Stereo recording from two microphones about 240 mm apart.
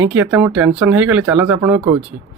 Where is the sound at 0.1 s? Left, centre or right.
Centre.